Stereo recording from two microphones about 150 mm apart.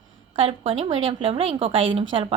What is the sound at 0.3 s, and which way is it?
A woman's voice, 40° right (ahead or behind).